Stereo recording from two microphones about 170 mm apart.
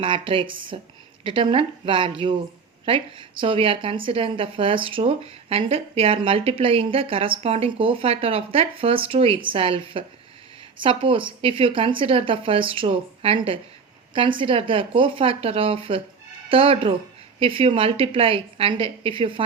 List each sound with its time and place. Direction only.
0.0 s speech: 30° right (ahead or behind)